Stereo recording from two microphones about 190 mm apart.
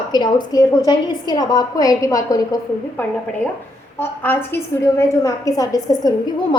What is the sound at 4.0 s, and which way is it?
A woman's voice, 10° left (ahead or behind).